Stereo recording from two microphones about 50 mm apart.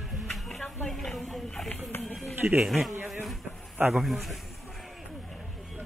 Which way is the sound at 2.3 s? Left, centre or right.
Right.